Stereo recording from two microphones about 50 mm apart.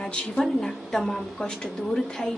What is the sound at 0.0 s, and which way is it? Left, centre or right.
Speech, centre.